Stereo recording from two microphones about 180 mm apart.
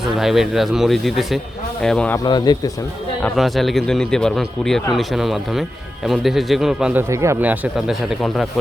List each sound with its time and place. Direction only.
0.2 s a man's voice: centre (ahead or behind)
2.1 s speech: 25° left (ahead or behind)
3.2 s a man's voice: centre (ahead or behind)
7.1 s speech: 15° right (ahead or behind)